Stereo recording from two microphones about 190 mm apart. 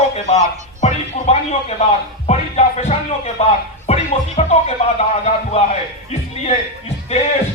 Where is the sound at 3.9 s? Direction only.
30° left (ahead or behind).